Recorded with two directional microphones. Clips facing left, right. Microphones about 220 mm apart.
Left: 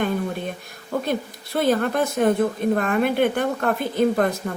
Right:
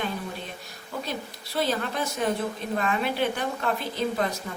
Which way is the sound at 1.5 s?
55° left (ahead or behind).